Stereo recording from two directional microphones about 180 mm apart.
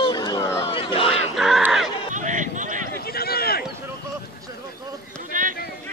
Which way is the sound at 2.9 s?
60° left (ahead or behind).